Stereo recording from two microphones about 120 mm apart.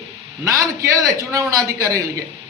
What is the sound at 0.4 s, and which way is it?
A man's voice, 25° right (ahead or behind).